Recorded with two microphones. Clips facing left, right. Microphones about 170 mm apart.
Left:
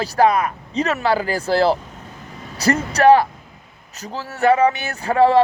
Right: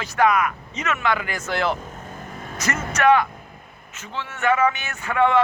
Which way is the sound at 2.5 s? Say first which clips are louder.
Left 7 dB; 35° left (ahead or behind).